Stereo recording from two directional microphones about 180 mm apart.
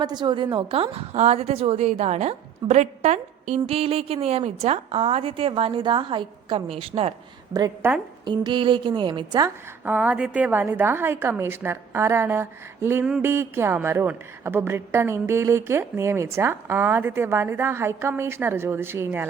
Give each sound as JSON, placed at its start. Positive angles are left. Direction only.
{"t": 0.0, "sound": "a woman's voice", "side_deg": -25}
{"t": 7.5, "sound": "a woman's voice", "side_deg": -15}
{"t": 8.2, "sound": "a woman's voice", "side_deg": -25}
{"t": 9.8, "sound": "a woman's voice", "side_deg": -10}